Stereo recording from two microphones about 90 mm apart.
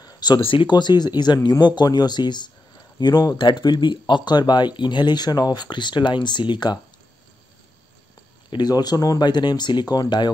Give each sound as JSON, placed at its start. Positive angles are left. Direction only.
{"t": 0.0, "sound": "a sound", "side_deg": 50}
{"t": 0.4, "sound": "speech", "side_deg": 75}
{"t": 3.3, "sound": "speech", "side_deg": 60}
{"t": 8.5, "sound": "speech", "side_deg": 50}